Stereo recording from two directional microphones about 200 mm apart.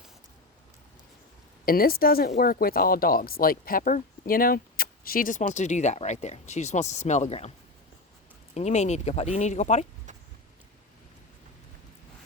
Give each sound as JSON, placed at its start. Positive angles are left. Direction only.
{"t": 1.6, "sound": "speech", "side_deg": 50}
{"t": 8.5, "sound": "speech", "side_deg": 35}